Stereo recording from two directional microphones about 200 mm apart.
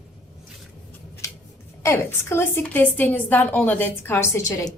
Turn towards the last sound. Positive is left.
turn(degrees=15)  # may be behind; listen again after turning